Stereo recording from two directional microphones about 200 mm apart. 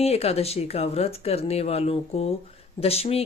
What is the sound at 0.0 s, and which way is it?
Speech, 30° left (ahead or behind).